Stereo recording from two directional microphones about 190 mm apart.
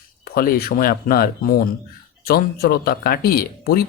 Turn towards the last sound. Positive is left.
turn(degrees=50)  # may be behind; listen again after turning